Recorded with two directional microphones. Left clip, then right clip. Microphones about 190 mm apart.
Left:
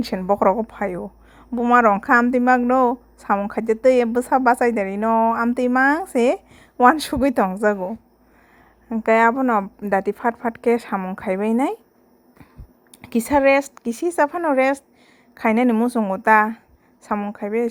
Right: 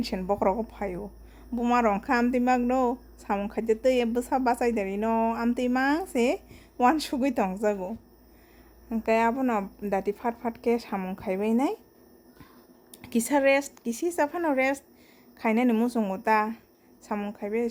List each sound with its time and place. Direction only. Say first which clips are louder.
0.0 s a woman's voice: left 8 dB; 30° left (ahead or behind)
13.0 s a woman's voice: left 7 dB; 25° left (ahead or behind)